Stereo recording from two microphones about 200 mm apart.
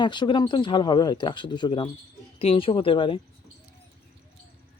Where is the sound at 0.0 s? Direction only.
25° left (ahead or behind).